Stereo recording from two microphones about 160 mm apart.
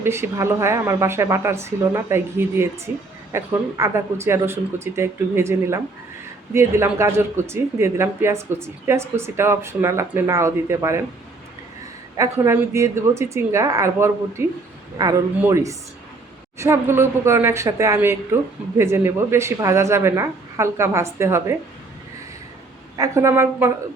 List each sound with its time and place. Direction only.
0.0 s speech: 15° right (ahead or behind)
12.1 s speech: 20° right (ahead or behind)
23.0 s speech: 15° right (ahead or behind)